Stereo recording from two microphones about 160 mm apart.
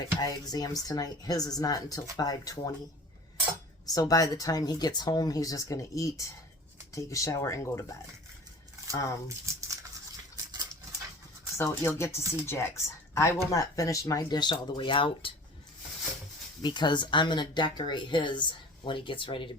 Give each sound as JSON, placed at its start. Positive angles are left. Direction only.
{"t": 0.2, "sound": "speech", "side_deg": 25}
{"t": 3.9, "sound": "speech", "side_deg": 20}
{"t": 8.9, "sound": "speech", "side_deg": 20}
{"t": 10.3, "sound": "a sound", "side_deg": -20}
{"t": 11.5, "sound": "speech", "side_deg": 15}
{"t": 16.6, "sound": "speech", "side_deg": 30}